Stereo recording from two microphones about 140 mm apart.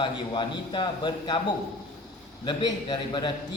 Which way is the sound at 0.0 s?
35° left (ahead or behind).